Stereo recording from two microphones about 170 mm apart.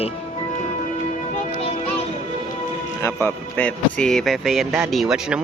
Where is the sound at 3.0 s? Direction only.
10° left (ahead or behind).